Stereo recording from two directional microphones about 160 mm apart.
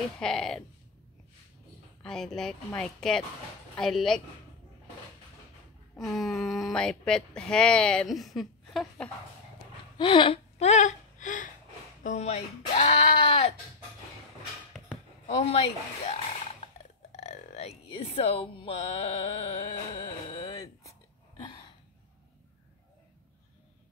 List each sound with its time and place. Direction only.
0.2 s speech: 5° left (ahead or behind)
2.0 s speech: 5° left (ahead or behind)
5.9 s speech: centre (ahead or behind)
9.9 s a sound: 30° left (ahead or behind); by 11.5 s 55° left (ahead or behind)
12.0 s speech: 45° left (ahead or behind)
15.2 s speech: 50° left (ahead or behind)
17.1 s a sound: 45° left (ahead or behind)